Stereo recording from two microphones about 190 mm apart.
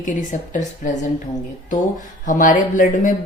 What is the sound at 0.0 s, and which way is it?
Speech, 40° left (ahead or behind).